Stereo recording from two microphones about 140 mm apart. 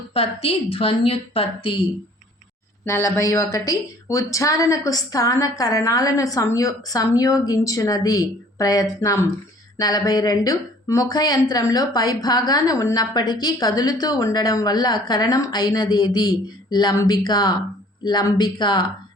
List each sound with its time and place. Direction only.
0.1 s a woman's voice: 45° left (ahead or behind)
2.8 s speech: 20° left (ahead or behind)